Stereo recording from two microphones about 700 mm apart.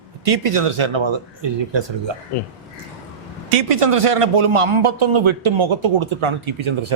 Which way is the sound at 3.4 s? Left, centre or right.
Right.